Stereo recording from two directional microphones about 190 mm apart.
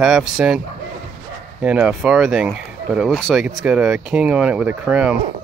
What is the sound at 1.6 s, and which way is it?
Speech, 5° right (ahead or behind).